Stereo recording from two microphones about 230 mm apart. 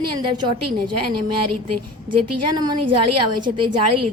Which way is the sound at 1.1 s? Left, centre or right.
Right.